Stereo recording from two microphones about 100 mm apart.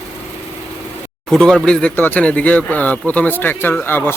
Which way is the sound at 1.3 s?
5° left (ahead or behind).